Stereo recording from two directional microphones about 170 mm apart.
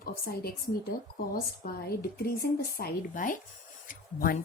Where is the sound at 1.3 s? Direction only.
65° left (ahead or behind).